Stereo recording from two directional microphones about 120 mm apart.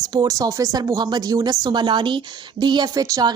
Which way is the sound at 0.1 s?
30° right (ahead or behind).